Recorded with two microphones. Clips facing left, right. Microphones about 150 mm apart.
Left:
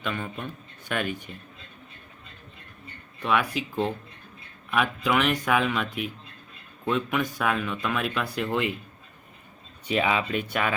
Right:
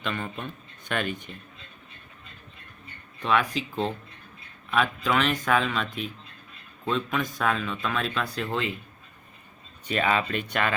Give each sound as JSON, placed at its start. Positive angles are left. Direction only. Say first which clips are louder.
{"t": 0.0, "sound": "speech", "louder": "even", "side_deg": 5}
{"t": 3.2, "sound": "speech", "louder": "even", "side_deg": 10}
{"t": 9.8, "sound": "speech", "louder": "even", "side_deg": 10}